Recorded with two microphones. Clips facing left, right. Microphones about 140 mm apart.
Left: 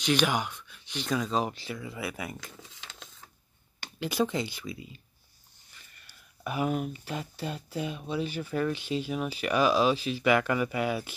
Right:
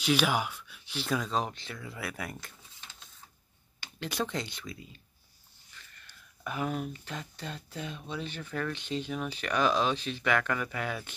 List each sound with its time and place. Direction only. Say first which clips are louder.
0.0 s speech: left 1 dB; 5° right (ahead or behind)
2.4 s a sound: left 5 dB; 90° left
4.0 s speech: left 5 dB; 5° left (ahead or behind)
5.9 s speech: even; 10° left (ahead or behind)